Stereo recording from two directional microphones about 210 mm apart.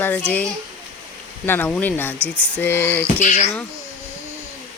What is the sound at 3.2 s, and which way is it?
Speech, 35° left (ahead or behind).